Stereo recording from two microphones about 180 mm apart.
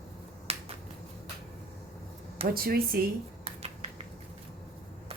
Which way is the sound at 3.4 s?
35° right (ahead or behind).